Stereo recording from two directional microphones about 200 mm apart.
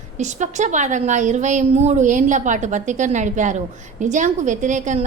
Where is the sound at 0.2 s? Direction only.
35° right (ahead or behind).